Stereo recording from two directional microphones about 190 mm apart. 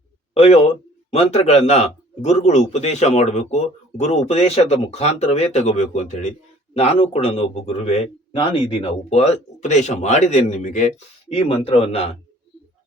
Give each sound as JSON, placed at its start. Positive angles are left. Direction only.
{"t": 0.3, "sound": "a man's voice", "side_deg": 35}
{"t": 11.3, "sound": "a man's voice", "side_deg": 30}